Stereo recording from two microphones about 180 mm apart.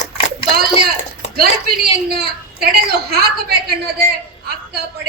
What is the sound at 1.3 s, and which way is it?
A woman's voice, 55° right (ahead or behind).